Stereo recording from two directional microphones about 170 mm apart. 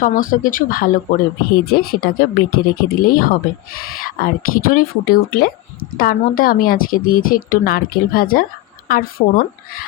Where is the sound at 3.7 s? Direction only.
60° left (ahead or behind).